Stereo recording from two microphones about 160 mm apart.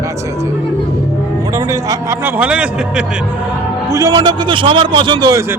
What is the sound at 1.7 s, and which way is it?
Speech, 20° right (ahead or behind).